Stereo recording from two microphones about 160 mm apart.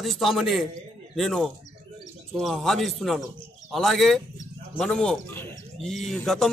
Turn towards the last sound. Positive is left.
turn(degrees=0)  # may be behind; listen again after turning